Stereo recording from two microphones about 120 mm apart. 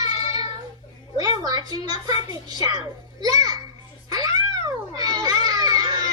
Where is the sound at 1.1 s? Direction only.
30° right (ahead or behind).